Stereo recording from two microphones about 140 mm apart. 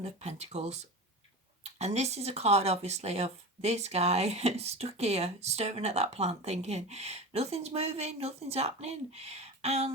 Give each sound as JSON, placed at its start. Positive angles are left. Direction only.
{"t": 0.0, "sound": "speech", "side_deg": -55}